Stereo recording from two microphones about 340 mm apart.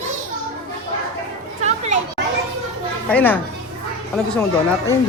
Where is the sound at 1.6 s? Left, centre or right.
Centre.